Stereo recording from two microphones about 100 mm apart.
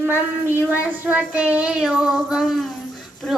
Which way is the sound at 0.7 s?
15° right (ahead or behind).